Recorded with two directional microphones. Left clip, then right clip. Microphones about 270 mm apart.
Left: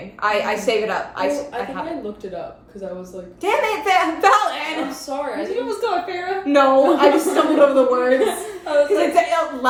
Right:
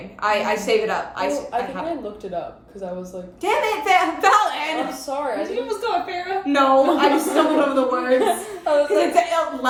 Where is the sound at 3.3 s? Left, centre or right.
Centre.